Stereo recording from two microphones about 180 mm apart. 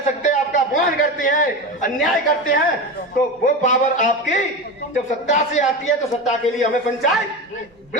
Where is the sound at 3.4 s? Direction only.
45° left (ahead or behind).